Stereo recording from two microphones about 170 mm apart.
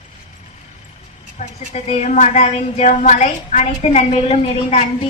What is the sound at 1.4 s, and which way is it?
A woman's voice, 40° left (ahead or behind).